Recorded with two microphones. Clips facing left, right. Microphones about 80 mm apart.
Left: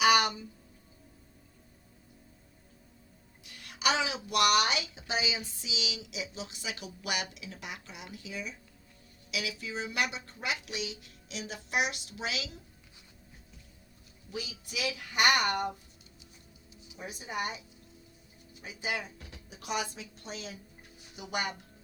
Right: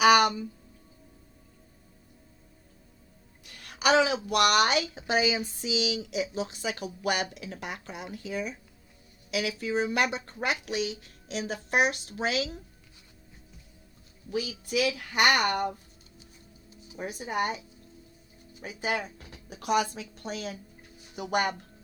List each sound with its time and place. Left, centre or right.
0.0 s a sound: right
3.4 s a woman's voice: right
14.3 s a woman's voice: right
18.6 s a woman's voice: right